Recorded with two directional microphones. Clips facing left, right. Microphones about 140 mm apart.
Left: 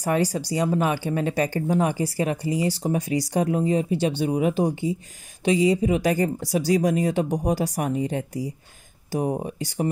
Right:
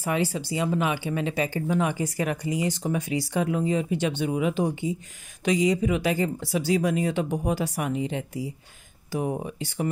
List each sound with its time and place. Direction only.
0.0 s speech: 40° left (ahead or behind)